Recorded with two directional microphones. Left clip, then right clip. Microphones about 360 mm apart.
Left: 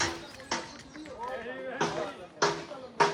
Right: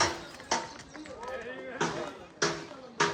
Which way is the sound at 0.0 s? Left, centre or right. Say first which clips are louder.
Right 3 dB; centre.